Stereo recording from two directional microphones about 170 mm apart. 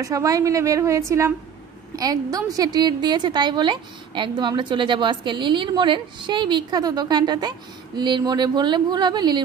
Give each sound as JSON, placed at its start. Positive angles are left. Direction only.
{"t": 0.0, "sound": "a woman's voice", "side_deg": -20}